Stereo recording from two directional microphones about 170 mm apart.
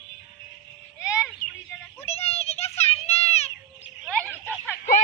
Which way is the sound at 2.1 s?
35° left (ahead or behind).